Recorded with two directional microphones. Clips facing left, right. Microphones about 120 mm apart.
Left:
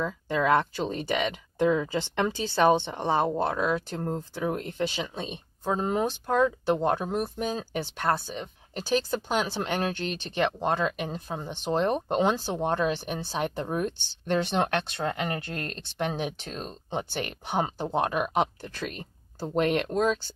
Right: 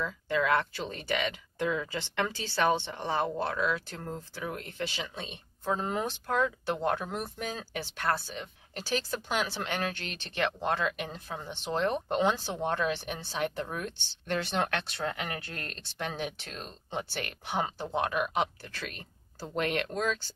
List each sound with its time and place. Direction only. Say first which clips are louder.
0.4 s speech: left 5 dB; 25° left (ahead or behind)
1.6 s speech: left 7 dB; 35° left (ahead or behind)
1.9 s speech: left 5 dB; 20° left (ahead or behind)
3.5 s speech: left 4 dB; 35° left (ahead or behind)
4.9 s speech: left 6 dB; 20° left (ahead or behind)
12.5 s speech: left 4 dB; 30° left (ahead or behind)
17.5 s speech: left 4 dB; 45° left (ahead or behind)
18.6 s speech: left 6 dB; 20° left (ahead or behind)